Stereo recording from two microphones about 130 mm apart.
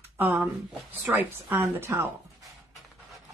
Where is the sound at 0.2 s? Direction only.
15° right (ahead or behind).